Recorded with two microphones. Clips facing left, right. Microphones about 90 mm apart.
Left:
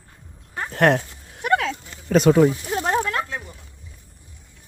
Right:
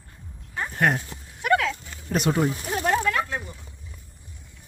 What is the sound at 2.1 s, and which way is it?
Speech, 90° left.